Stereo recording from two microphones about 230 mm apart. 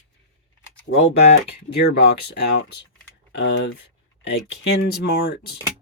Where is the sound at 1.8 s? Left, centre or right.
Left.